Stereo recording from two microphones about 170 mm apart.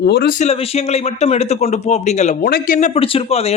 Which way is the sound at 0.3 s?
35° left (ahead or behind).